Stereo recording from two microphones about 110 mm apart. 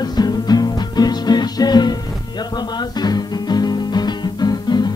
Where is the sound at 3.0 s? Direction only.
40° left (ahead or behind).